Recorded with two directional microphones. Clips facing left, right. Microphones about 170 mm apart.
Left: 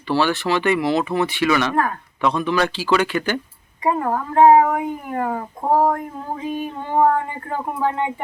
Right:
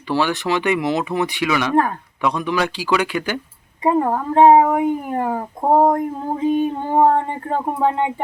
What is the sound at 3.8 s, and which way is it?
Speech, 25° right (ahead or behind).